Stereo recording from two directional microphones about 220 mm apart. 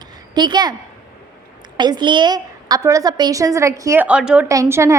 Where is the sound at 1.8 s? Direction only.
20° right (ahead or behind).